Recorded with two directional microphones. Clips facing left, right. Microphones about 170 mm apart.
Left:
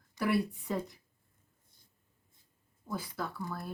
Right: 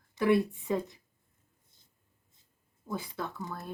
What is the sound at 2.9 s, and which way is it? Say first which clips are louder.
Speech: right 1 dB; 20° right (ahead or behind).